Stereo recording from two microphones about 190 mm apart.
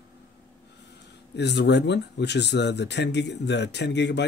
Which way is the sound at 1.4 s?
65° left (ahead or behind).